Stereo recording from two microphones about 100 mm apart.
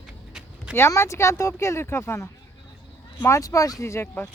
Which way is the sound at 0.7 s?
25° left (ahead or behind).